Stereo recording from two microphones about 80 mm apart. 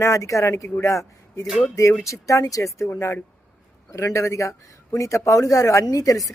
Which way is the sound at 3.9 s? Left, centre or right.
Left.